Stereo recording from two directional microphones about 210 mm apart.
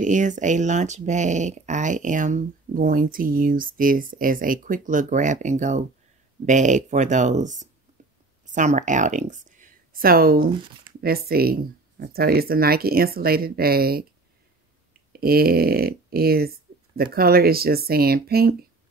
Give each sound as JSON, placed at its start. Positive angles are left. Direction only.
{"t": 0.0, "sound": "speech", "side_deg": -35}
{"t": 15.1, "sound": "speech", "side_deg": -45}